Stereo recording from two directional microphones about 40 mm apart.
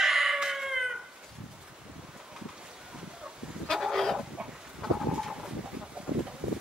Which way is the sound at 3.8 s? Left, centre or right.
Centre.